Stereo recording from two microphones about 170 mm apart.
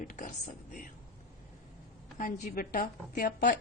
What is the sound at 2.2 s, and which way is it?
Speech, 55° left (ahead or behind).